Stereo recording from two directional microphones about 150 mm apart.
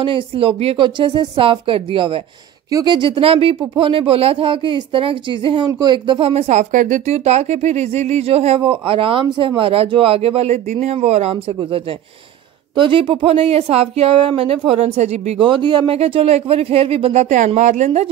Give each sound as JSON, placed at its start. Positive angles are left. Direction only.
{"t": 0.0, "sound": "speech", "side_deg": -35}
{"t": 15.4, "sound": "speech", "side_deg": -30}